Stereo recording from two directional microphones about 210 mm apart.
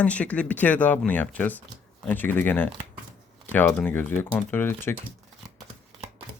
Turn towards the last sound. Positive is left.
turn(degrees=10)  # may be behind; listen again after turning